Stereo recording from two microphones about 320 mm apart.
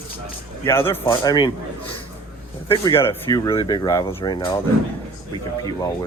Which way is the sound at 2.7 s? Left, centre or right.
Centre.